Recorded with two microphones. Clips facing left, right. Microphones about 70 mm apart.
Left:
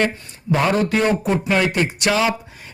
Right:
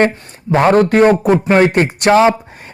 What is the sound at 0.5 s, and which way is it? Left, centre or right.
A man's voice, right.